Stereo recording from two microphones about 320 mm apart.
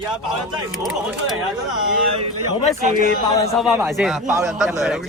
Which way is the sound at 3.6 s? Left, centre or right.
Centre.